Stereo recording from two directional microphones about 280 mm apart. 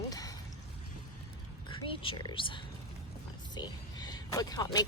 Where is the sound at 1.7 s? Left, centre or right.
Centre.